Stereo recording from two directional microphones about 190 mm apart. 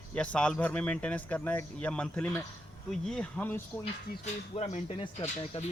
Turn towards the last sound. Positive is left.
turn(degrees=35)  # may be behind; listen again after turning